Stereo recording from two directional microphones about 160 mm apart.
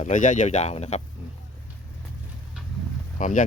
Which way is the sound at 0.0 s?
50° left (ahead or behind).